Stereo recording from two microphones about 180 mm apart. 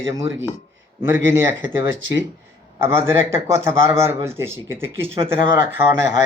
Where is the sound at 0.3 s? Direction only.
15° right (ahead or behind).